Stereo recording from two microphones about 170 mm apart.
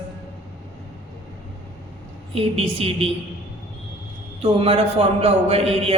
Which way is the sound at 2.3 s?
35° right (ahead or behind).